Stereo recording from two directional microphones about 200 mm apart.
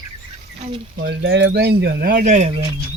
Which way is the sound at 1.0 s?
60° right (ahead or behind).